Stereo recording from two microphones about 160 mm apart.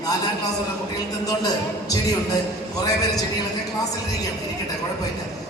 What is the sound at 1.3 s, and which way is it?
Speech, 25° left (ahead or behind).